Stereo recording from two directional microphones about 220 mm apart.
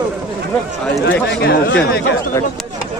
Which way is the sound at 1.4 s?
50° left (ahead or behind).